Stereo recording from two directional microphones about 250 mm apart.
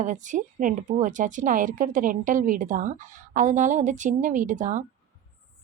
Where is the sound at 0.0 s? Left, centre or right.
Right.